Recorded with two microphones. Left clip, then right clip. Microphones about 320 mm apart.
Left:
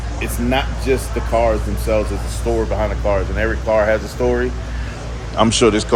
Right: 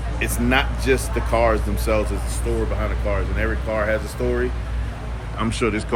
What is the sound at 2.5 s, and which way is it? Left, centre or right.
Speech, centre.